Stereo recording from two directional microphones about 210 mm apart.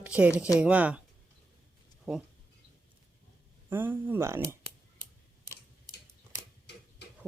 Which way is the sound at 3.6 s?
10° right (ahead or behind).